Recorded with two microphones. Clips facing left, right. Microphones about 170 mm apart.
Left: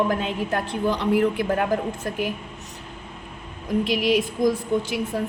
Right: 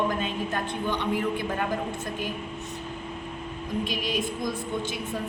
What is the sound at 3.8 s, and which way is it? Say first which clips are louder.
Speech: left 9 dB; 90° left.